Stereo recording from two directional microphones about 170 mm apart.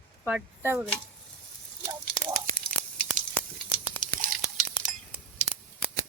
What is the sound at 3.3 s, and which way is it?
Sizzle, 10° left (ahead or behind).